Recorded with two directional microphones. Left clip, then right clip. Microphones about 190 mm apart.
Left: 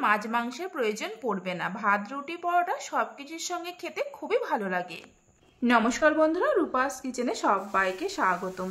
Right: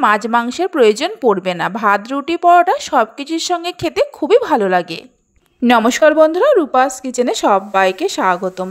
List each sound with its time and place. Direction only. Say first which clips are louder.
0.0 s a woman's voice: right 12 dB; 40° right (ahead or behind)